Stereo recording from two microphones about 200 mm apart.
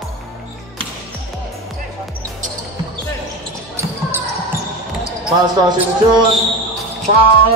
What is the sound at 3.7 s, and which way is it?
Basketball bounce, 10° right (ahead or behind).